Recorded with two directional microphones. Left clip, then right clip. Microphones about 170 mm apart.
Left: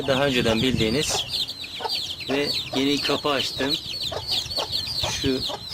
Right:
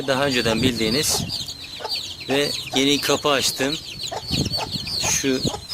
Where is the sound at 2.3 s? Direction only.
15° right (ahead or behind).